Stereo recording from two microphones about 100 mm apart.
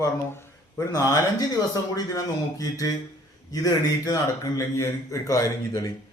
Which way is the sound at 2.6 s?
35° left (ahead or behind).